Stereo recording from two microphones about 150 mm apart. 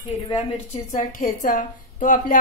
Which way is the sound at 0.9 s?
65° left (ahead or behind).